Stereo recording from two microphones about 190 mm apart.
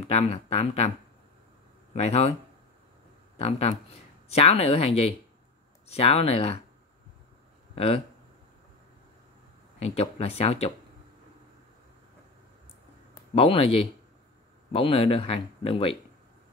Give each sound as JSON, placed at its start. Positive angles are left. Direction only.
{"t": 0.1, "sound": "speech", "side_deg": 35}
{"t": 2.0, "sound": "speech", "side_deg": 35}
{"t": 3.3, "sound": "speech", "side_deg": 35}
{"t": 7.7, "sound": "speech", "side_deg": 30}
{"t": 9.8, "sound": "speech", "side_deg": 30}
{"t": 13.3, "sound": "speech", "side_deg": 30}